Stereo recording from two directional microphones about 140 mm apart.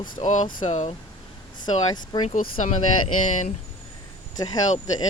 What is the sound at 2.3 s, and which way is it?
Speech, 70° left (ahead or behind).